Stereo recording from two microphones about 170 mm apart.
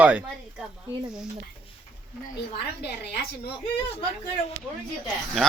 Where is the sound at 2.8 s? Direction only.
70° left (ahead or behind).